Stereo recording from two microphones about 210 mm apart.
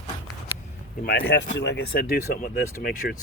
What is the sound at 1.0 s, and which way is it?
Speech, 50° left (ahead or behind).